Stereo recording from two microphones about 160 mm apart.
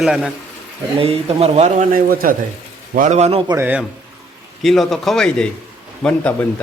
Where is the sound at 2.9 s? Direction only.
50° right (ahead or behind).